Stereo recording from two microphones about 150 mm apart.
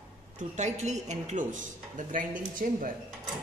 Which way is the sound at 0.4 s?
50° right (ahead or behind).